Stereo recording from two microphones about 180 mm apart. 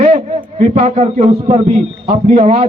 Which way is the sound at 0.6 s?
40° right (ahead or behind).